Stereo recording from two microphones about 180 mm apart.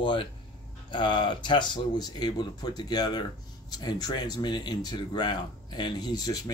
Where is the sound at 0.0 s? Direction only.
30° left (ahead or behind).